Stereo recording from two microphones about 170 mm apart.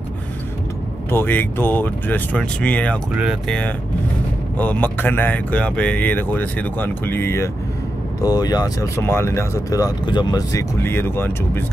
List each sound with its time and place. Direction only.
1.1 s speech: 10° left (ahead or behind)